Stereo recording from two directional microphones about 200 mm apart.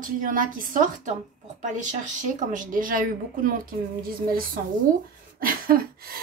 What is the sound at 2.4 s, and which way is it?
Speech, 40° right (ahead or behind).